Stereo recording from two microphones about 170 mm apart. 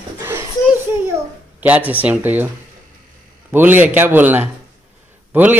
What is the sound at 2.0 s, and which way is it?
Cutlery, 10° right (ahead or behind).